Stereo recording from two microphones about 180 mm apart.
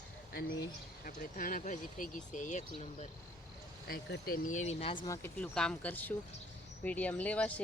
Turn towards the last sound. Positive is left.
turn(degrees=10)  # may be behind; listen again after turning